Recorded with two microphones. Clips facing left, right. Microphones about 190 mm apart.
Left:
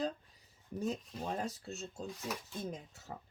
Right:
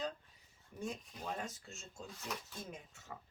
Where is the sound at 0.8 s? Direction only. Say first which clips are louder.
Left 6 dB; 35° left (ahead or behind).